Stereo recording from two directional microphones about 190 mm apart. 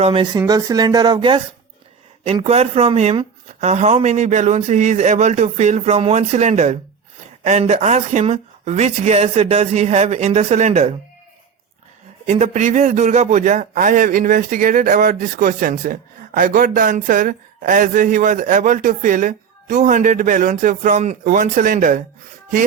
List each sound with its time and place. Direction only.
0.0 s speech: 25° right (ahead or behind)
12.2 s a man's voice: 35° right (ahead or behind)